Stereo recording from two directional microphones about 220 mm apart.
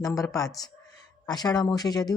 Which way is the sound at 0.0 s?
15° left (ahead or behind).